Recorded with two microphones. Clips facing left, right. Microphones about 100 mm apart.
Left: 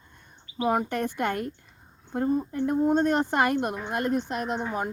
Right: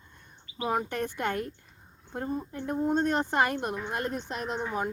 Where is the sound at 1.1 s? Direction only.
60° left (ahead or behind).